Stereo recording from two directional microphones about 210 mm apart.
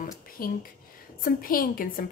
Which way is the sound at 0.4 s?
45° left (ahead or behind).